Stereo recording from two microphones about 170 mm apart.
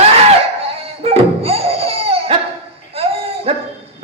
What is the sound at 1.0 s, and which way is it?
Music, 35° right (ahead or behind).